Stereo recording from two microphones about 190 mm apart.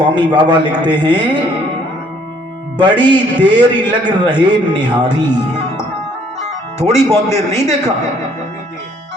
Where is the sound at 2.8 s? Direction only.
25° right (ahead or behind).